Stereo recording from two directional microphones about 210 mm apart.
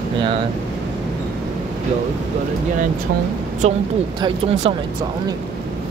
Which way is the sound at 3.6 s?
35° right (ahead or behind).